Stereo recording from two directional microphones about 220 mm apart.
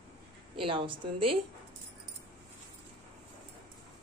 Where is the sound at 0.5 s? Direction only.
25° right (ahead or behind).